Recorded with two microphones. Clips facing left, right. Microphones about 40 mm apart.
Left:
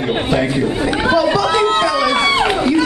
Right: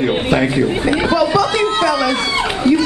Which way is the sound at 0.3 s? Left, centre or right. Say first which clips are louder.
Right 1 dB; centre.